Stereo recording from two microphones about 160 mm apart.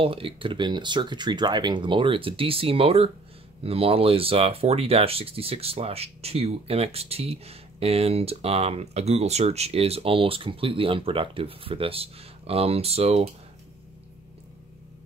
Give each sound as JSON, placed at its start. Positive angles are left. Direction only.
{"t": 0.0, "sound": "speech", "side_deg": -35}